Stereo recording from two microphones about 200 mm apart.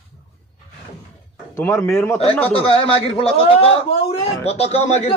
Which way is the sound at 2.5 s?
30° left (ahead or behind).